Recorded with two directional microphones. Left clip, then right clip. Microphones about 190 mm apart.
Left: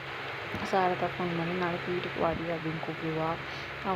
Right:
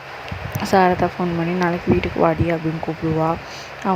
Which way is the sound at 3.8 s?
50° right (ahead or behind).